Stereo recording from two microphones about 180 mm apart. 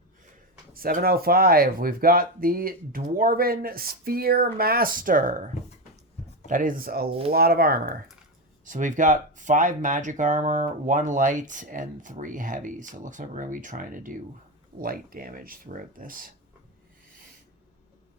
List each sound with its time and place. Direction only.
0.7 s speech: 50° right (ahead or behind)
6.5 s speech: 50° right (ahead or behind)
8.6 s speech: 45° right (ahead or behind)